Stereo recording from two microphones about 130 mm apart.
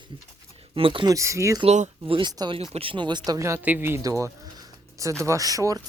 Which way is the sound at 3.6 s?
15° right (ahead or behind).